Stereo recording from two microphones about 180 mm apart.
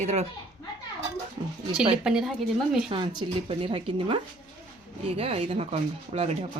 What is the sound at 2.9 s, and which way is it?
A woman's voice, 25° right (ahead or behind).